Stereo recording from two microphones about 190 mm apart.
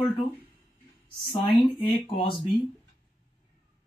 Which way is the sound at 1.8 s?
30° left (ahead or behind).